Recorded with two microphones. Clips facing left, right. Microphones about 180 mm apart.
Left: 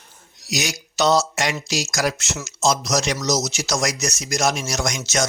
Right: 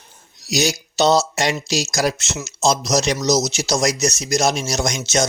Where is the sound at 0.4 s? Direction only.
30° right (ahead or behind).